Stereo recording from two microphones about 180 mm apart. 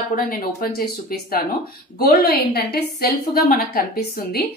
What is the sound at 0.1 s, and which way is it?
A woman's voice, 55° left (ahead or behind).